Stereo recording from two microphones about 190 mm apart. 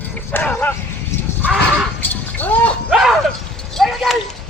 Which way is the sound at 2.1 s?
10° left (ahead or behind).